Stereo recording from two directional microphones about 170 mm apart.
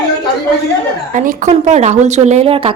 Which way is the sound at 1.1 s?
50° right (ahead or behind).